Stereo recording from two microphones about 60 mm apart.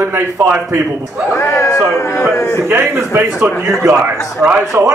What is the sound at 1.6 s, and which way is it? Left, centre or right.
Speech, left.